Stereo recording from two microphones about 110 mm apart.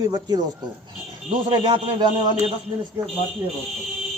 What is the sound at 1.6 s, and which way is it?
Speech, 55° right (ahead or behind).